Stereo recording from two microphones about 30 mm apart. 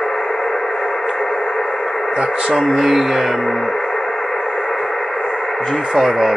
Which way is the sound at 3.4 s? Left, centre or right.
Centre.